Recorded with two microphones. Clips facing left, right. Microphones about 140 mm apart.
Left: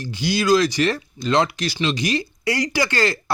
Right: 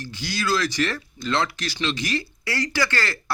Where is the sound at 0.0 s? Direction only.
15° left (ahead or behind).